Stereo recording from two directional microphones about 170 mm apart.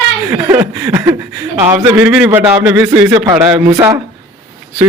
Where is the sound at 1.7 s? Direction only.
10° right (ahead or behind).